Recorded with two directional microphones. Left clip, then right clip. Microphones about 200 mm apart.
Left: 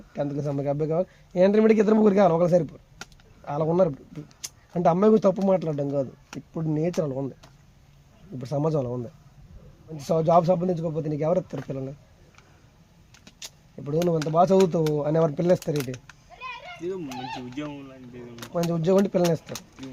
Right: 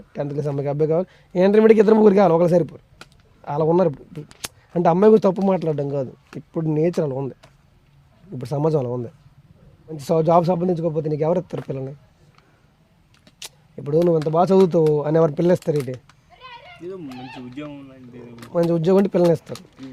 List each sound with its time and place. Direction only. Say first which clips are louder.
0.1 s a man's voice: right 3 dB; 55° right (ahead or behind)
8.4 s a man's voice: right 5 dB; 60° right (ahead or behind)
10.0 s a man's voice: right 3 dB; 55° right (ahead or behind)
13.4 s a sound: right 5 dB; 60° right (ahead or behind)
14.3 s a man's voice: right 3 dB; 60° right (ahead or behind)
15.7 s cat: right 6 dB; 5° left (ahead or behind)
16.8 s speech: left 2 dB; 10° right (ahead or behind)
18.5 s a man's voice: right 5 dB; 55° right (ahead or behind)